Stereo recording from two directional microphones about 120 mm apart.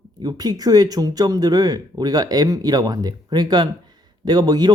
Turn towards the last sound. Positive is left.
turn(degrees=-35)  # may be behind; listen again after turning